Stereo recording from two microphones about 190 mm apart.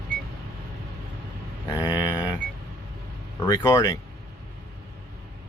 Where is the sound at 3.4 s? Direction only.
20° left (ahead or behind).